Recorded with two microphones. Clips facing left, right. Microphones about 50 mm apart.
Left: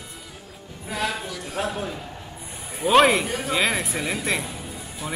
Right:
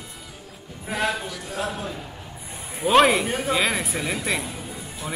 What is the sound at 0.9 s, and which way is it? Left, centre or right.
Speech, right.